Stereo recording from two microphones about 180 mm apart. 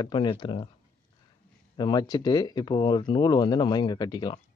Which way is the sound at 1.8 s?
25° left (ahead or behind).